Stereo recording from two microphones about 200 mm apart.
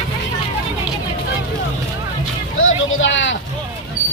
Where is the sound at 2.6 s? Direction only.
80° left.